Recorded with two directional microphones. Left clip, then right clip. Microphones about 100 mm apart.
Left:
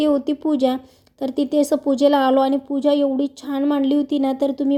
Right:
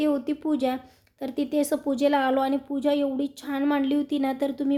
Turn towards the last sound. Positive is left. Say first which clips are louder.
# left 6 dB
turn(degrees=30)  # may be behind; listen again after turning